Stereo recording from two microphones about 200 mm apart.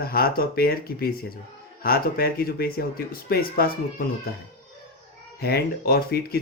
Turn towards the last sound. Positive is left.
turn(degrees=50)  # may be behind; listen again after turning